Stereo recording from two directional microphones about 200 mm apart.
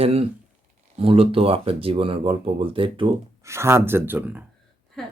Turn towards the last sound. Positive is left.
turn(degrees=0)  # may be behind; listen again after turning